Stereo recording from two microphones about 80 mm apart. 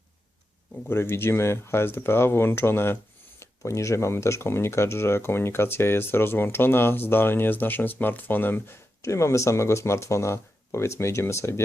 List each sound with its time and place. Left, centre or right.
0.9 s speech: left